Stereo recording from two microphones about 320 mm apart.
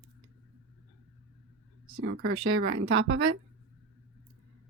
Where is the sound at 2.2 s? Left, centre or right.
Right.